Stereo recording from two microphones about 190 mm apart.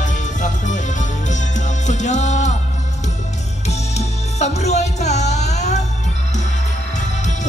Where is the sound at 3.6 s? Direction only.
35° left (ahead or behind).